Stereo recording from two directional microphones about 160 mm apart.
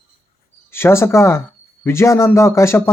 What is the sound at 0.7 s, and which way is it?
Speech, 15° left (ahead or behind).